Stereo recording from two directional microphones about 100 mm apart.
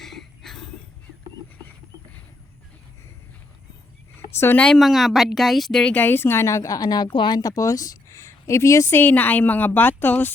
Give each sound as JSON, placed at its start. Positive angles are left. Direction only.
{"t": 0.0, "sound": "a sound", "side_deg": 5}
{"t": 4.4, "sound": "speech", "side_deg": 25}
{"t": 4.6, "sound": "speech", "side_deg": 5}
{"t": 9.0, "sound": "speech", "side_deg": 20}